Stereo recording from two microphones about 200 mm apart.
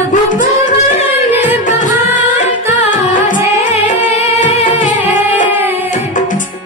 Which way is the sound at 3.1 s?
40° left (ahead or behind).